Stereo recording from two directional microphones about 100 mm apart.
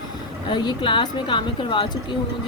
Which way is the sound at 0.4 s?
50° left (ahead or behind).